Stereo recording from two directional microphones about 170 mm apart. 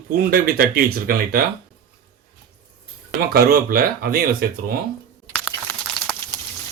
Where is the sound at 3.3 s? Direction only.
60° right (ahead or behind).